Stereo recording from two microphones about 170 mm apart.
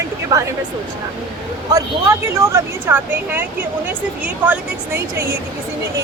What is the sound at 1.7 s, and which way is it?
Speech, 15° right (ahead or behind).